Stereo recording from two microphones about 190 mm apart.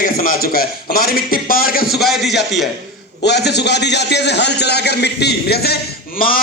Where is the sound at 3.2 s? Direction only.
60° left (ahead or behind).